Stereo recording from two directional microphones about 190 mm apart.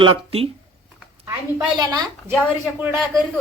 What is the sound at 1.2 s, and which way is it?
A man's voice, 15° right (ahead or behind).